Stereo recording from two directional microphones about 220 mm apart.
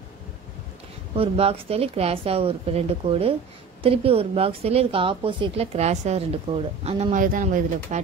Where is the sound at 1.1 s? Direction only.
25° right (ahead or behind).